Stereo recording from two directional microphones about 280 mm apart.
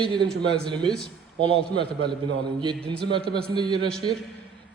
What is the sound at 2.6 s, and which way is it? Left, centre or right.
Speech, centre.